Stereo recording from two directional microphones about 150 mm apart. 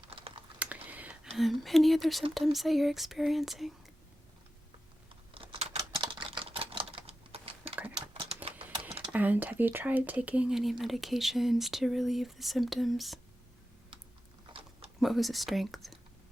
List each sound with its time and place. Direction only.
0.1 s typing: 35° right (ahead or behind)
0.6 s a sound: 10° right (ahead or behind)
2.3 s speech: centre (ahead or behind)
5.3 s typing: 35° right (ahead or behind)
8.1 s typewriter: 35° right (ahead or behind)
8.4 s a sound: 40° right (ahead or behind)
9.1 s speech: 10° right (ahead or behind)
15.0 s speech: centre (ahead or behind)